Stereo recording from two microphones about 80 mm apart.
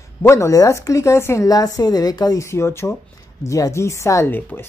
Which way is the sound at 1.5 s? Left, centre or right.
Left.